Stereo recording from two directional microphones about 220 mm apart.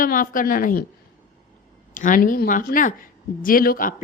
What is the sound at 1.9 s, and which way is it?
A woman's voice, 35° left (ahead or behind).